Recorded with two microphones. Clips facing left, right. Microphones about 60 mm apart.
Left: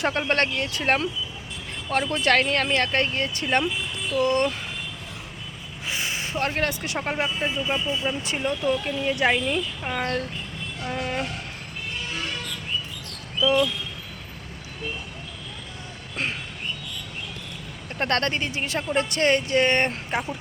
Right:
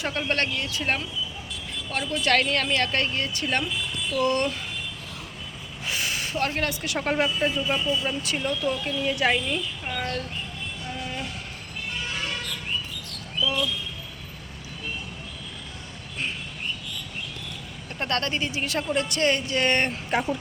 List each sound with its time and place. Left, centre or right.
0.1 s speech: left
5.9 s a sound: left
7.2 s speech: left
10.0 s speech: left
10.8 s a sound: left
18.0 s speech: left
19.6 s speech: left